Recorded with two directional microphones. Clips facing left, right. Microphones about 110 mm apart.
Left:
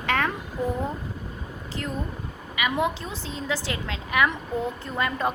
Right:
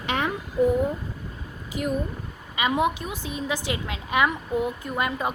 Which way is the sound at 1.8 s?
15° right (ahead or behind).